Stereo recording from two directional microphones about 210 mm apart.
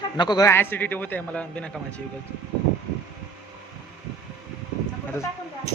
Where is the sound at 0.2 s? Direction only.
20° left (ahead or behind).